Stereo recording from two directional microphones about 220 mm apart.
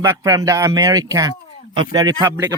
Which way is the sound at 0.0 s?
15° right (ahead or behind).